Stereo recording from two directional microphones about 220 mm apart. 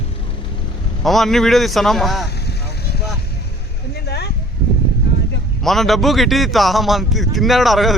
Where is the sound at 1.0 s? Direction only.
Centre (ahead or behind).